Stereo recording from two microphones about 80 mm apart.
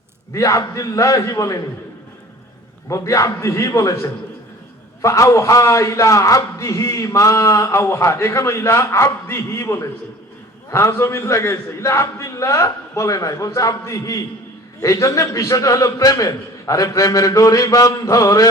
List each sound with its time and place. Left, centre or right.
0.3 s a man's voice: left
2.9 s a man's voice: left